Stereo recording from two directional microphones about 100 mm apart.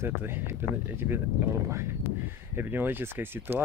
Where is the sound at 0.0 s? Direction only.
25° right (ahead or behind).